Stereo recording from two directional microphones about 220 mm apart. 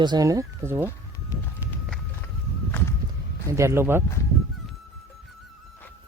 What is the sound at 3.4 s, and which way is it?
Speech, 15° right (ahead or behind).